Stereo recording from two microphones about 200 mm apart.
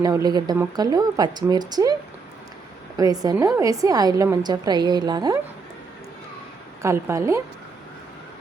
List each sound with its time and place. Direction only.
0.0 s a woman's voice: 20° right (ahead or behind)
3.0 s a woman's voice: 20° right (ahead or behind)
6.8 s a woman's voice: 15° right (ahead or behind)